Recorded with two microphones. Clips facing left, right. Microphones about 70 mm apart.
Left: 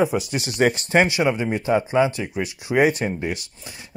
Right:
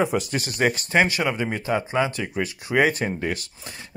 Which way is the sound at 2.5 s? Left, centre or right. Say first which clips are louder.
Left 3 dB; right.